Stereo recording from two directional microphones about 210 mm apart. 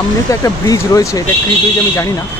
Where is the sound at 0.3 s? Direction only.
15° left (ahead or behind).